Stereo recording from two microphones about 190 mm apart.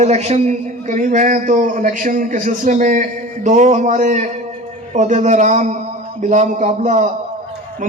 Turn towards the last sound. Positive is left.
turn(degrees=-40)  # may be behind; listen again after turning